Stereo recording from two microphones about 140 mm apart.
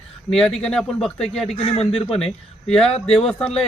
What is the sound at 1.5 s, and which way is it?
Speech, 45° left (ahead or behind).